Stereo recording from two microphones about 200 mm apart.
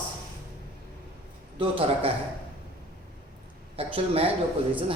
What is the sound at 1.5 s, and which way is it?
Speech, 30° right (ahead or behind).